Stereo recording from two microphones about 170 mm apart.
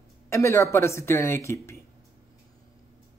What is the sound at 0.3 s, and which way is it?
Speech, 15° left (ahead or behind).